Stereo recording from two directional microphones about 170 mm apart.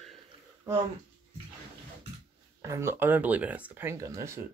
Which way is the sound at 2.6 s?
15° right (ahead or behind).